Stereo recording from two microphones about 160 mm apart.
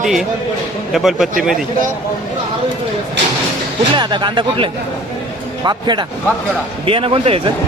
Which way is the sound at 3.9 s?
30° right (ahead or behind).